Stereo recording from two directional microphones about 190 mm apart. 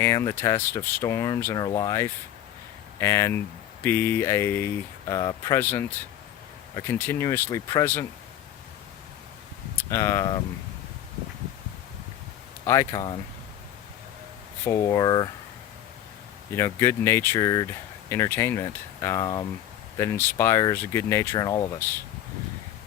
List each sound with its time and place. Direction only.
0.0 s speech: 15° left (ahead or behind)
9.7 s speech: 15° left (ahead or behind)
12.6 s speech: 15° left (ahead or behind)
14.6 s speech: 15° left (ahead or behind)
16.6 s speech: 15° left (ahead or behind)